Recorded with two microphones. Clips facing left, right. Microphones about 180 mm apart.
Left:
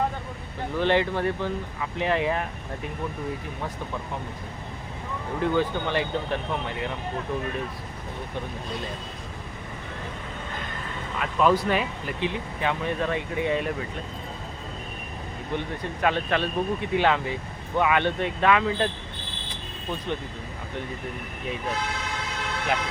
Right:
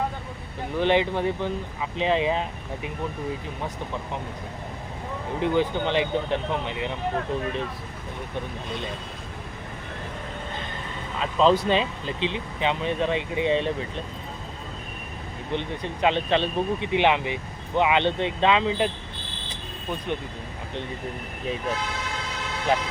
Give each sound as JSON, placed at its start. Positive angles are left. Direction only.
{"t": 0.7, "sound": "speech", "side_deg": -15}
{"t": 5.4, "sound": "speech", "side_deg": -20}
{"t": 11.2, "sound": "speech", "side_deg": -25}
{"t": 15.5, "sound": "speech", "side_deg": -20}